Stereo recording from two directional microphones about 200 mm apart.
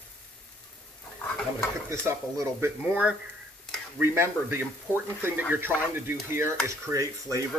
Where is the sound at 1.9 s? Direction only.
15° right (ahead or behind).